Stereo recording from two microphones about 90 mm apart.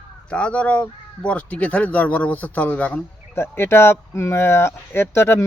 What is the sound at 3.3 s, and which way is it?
Speech, 25° left (ahead or behind).